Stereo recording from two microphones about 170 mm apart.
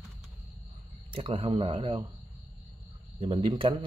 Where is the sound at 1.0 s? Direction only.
30° right (ahead or behind).